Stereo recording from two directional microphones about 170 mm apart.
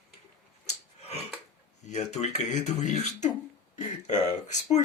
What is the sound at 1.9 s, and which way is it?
Speech, 40° left (ahead or behind).